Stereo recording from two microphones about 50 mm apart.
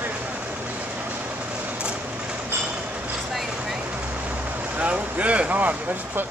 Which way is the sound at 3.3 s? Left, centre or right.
Centre.